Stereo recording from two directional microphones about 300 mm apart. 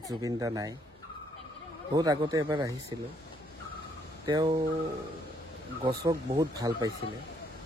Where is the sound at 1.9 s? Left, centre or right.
Centre.